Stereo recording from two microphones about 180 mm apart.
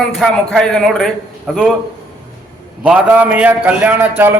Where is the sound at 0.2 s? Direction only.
Centre (ahead or behind).